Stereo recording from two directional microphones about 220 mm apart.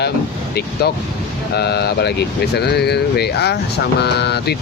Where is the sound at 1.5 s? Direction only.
50° left (ahead or behind).